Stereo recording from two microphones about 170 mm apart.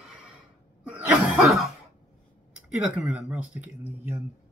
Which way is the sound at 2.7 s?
5° right (ahead or behind).